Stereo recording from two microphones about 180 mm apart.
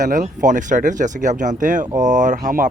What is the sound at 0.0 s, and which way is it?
Speech, 45° right (ahead or behind).